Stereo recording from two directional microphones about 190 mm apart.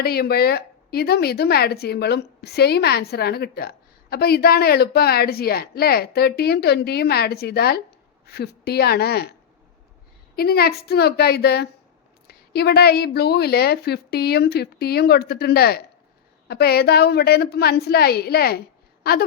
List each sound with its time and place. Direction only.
0.0 s a woman's voice: 55° left (ahead or behind)
10.3 s a woman's voice: 55° left (ahead or behind)